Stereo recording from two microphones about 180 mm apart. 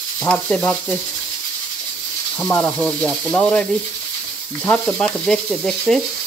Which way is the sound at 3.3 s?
5° left (ahead or behind).